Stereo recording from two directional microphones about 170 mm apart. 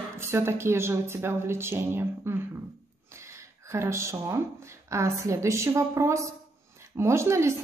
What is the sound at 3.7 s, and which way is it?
A woman's voice, 15° right (ahead or behind).